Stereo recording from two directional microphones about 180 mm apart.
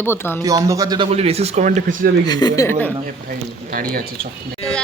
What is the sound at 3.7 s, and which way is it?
Speech, 55° right (ahead or behind).